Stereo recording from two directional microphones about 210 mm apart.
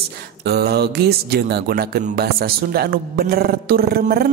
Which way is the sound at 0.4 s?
50° right (ahead or behind).